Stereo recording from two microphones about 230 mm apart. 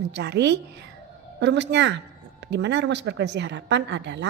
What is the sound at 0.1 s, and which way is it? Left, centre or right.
A woman's voice, right.